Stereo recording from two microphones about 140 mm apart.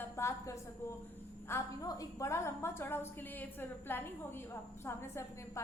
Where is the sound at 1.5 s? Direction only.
15° left (ahead or behind).